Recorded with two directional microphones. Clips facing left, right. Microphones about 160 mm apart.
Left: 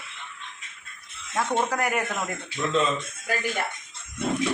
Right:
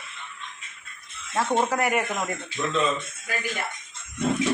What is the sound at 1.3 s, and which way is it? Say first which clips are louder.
Speech: right 2 dB; 5° right (ahead or behind).